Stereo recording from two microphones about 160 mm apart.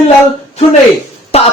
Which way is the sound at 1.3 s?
40° left (ahead or behind).